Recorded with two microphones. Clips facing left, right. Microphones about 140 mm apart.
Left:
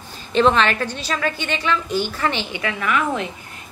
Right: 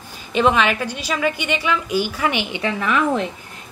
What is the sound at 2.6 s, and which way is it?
Speech, 30° right (ahead or behind).